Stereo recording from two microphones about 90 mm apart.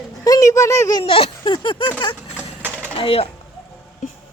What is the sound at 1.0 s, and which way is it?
Speech, 90° left.